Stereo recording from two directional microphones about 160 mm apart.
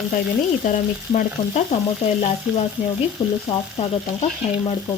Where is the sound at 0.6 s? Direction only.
55° left (ahead or behind).